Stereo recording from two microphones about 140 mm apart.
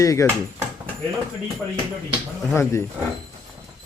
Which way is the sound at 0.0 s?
20° left (ahead or behind).